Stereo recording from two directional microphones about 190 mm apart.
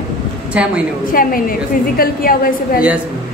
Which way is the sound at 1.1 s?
50° left (ahead or behind).